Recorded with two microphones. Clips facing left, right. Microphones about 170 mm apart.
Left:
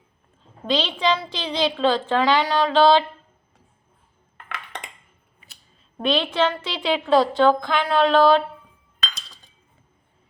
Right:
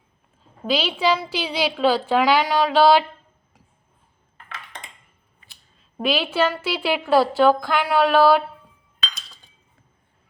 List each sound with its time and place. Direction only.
0.7 s a woman's voice: 10° right (ahead or behind)
4.4 s a sound: 70° left (ahead or behind)
6.0 s a woman's voice: 5° right (ahead or behind)